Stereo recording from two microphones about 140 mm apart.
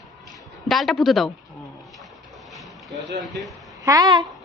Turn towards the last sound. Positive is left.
turn(degrees=-25)  # may be behind; listen again after turning